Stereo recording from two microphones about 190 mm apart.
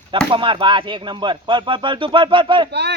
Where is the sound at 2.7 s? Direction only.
65° right (ahead or behind).